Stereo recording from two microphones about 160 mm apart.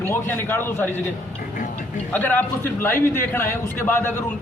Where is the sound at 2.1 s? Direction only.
10° left (ahead or behind).